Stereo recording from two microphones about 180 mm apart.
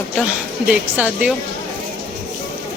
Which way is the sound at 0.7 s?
5° right (ahead or behind).